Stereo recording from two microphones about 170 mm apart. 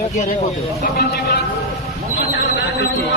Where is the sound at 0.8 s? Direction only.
65° left (ahead or behind).